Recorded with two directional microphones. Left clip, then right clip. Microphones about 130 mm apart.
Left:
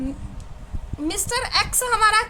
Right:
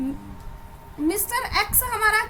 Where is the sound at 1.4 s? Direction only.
25° left (ahead or behind).